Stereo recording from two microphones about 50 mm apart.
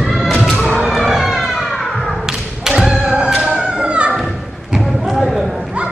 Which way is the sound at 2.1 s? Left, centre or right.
Centre.